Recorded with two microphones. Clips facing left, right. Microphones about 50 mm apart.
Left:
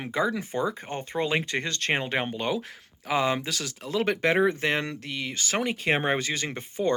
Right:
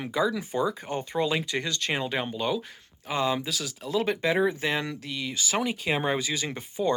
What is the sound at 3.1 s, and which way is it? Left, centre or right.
Speech, left.